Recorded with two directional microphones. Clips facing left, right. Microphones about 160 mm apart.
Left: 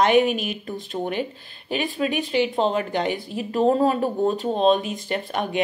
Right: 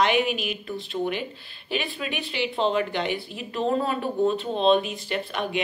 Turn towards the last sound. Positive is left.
turn(degrees=45)  # may be behind; listen again after turning